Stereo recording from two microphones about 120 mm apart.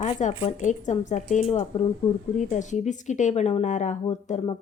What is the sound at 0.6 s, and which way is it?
A woman's voice, 90° left.